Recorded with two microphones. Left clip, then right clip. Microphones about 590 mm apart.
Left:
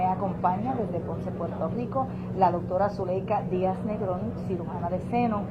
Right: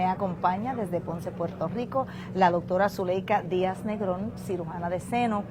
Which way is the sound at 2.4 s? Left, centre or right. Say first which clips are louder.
Right 1 dB; right.